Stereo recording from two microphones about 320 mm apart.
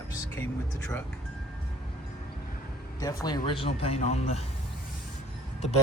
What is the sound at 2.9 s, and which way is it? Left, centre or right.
Speech, centre.